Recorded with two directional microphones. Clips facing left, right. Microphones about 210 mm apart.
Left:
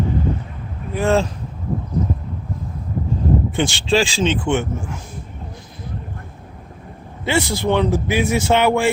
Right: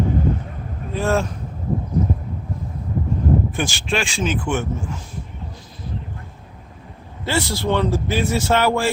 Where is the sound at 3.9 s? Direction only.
30° left (ahead or behind).